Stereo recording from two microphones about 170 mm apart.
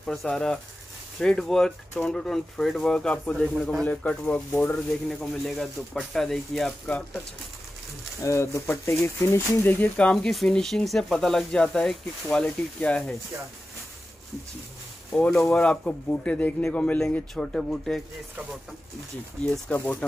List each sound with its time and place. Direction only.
0.0 s speech: centre (ahead or behind)
8.2 s speech: 15° left (ahead or behind)
15.1 s speech: 5° left (ahead or behind)
19.5 s speech: 5° left (ahead or behind)